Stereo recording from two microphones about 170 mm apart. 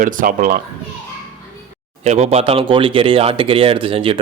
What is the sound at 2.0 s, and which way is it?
Speech, 40° right (ahead or behind).